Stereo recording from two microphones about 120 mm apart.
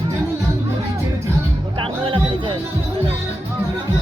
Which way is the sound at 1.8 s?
45° right (ahead or behind).